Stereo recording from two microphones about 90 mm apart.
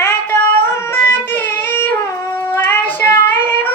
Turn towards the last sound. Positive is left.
turn(degrees=25)  # may be behind; listen again after turning